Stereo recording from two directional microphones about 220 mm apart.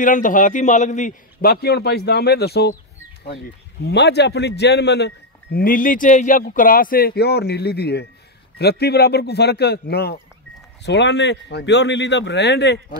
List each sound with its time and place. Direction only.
0.0 s a man's voice: 35° left (ahead or behind)
3.8 s a man's voice: 50° left (ahead or behind)